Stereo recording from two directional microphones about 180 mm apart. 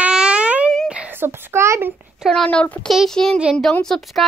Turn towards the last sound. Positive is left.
turn(degrees=0)  # may be behind; listen again after turning